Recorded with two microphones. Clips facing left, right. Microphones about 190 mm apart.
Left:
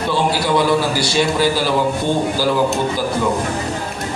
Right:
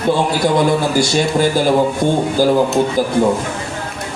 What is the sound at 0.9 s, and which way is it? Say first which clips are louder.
Speech: right 3 dB; 50° right (ahead or behind).